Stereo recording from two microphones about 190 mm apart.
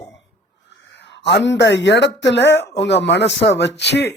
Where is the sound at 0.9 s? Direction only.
65° left (ahead or behind).